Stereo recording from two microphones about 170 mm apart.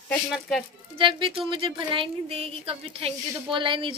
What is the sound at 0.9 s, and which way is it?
A woman's voice, 30° right (ahead or behind).